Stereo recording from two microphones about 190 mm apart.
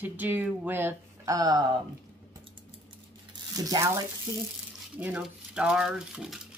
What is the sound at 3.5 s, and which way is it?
Speech, 20° right (ahead or behind).